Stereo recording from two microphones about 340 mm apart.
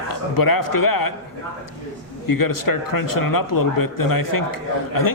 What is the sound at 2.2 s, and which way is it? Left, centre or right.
A man's voice, left.